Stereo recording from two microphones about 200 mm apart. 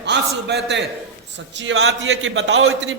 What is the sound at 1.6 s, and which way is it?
A man's voice, 80° right.